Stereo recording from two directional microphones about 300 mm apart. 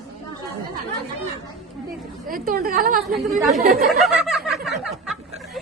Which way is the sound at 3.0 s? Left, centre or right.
Centre.